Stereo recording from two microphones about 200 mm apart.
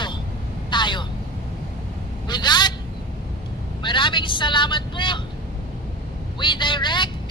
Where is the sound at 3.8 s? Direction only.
25° left (ahead or behind).